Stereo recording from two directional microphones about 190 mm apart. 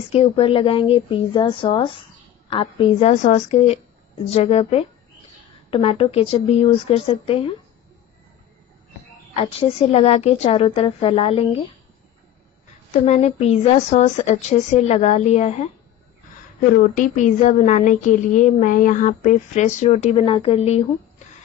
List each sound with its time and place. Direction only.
0.1 s speech: 30° left (ahead or behind)
9.3 s speech: 30° left (ahead or behind)
13.0 s speech: 35° left (ahead or behind)
16.7 s speech: 45° left (ahead or behind)